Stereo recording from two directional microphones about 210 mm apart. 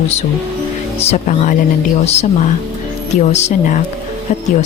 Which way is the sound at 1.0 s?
30° left (ahead or behind).